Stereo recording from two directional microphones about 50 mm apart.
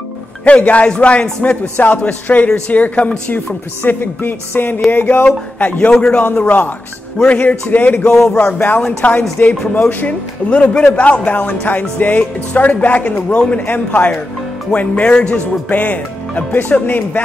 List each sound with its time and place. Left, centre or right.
0.5 s a man's voice: left
3.8 s music: left
4.9 s speech: left
5.9 s speech: centre
6.4 s speech: left
8.1 s speech: centre
8.7 s a man's voice: left